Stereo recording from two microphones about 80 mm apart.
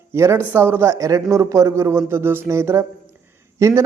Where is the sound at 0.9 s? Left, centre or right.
Right.